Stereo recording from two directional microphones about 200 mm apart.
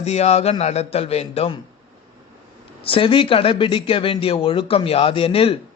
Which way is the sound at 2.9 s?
25° left (ahead or behind).